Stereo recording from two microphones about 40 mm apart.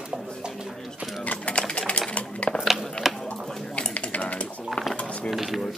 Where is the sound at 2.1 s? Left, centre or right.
Left.